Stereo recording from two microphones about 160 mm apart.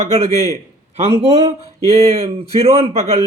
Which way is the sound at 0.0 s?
40° right (ahead or behind).